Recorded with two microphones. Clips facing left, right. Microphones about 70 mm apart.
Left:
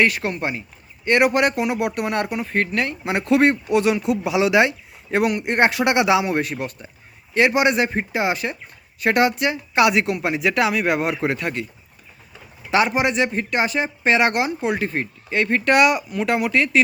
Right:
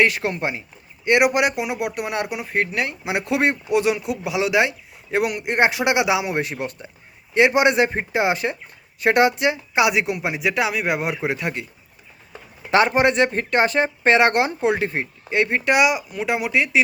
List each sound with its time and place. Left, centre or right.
0.0 s speech: right; by 6.3 s centre
6.3 s speech: right
9.8 s speech: centre
12.7 s speech: right; by 16.8 s centre